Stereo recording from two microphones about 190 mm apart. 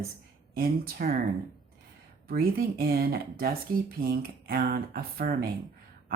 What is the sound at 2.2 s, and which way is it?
Speech, 50° right (ahead or behind).